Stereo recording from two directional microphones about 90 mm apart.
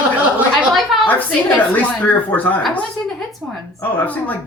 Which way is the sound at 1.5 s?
15° left (ahead or behind).